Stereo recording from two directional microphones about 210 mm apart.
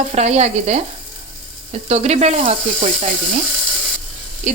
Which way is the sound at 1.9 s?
30° right (ahead or behind).